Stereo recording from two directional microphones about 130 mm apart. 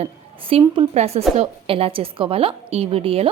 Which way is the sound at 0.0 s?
45° right (ahead or behind).